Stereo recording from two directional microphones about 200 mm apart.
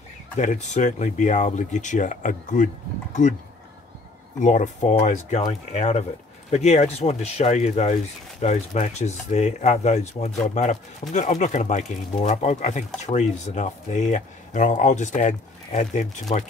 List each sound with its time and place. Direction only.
0.4 s speech: 40° left (ahead or behind)
4.4 s speech: 40° left (ahead or behind)